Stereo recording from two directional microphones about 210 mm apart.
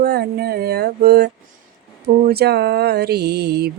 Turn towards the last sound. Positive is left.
turn(degrees=-50)  # may be behind; listen again after turning